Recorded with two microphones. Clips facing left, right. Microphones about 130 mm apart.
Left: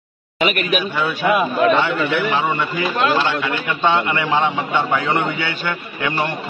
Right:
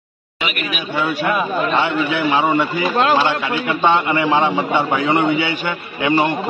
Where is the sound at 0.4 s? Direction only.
45° left (ahead or behind).